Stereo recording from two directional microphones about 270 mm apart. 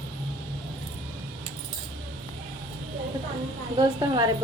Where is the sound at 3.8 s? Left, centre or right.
Centre.